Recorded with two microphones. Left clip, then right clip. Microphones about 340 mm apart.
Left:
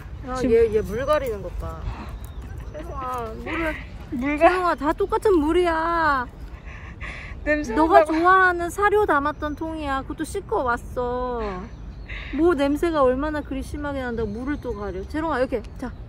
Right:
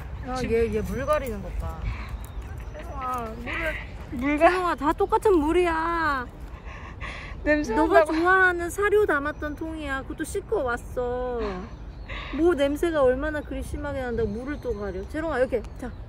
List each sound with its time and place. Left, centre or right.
0.3 s speech: centre
2.8 s clip-clop: left
3.5 s speech: centre
7.0 s speech: centre
8.3 s speech: centre
12.1 s a sound: centre
12.4 s speech: centre